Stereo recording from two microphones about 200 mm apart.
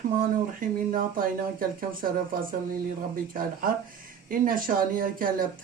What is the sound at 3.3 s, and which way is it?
Speech, 45° right (ahead or behind).